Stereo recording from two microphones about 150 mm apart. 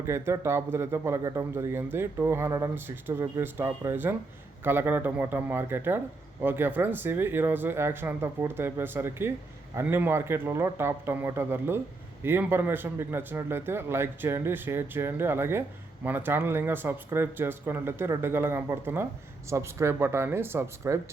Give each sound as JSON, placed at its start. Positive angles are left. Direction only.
{"t": 0.0, "sound": "speech", "side_deg": -15}